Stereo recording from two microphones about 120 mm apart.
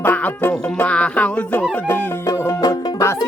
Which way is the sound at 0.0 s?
15° left (ahead or behind).